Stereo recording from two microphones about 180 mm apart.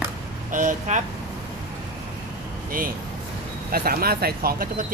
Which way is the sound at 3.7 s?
55° right (ahead or behind).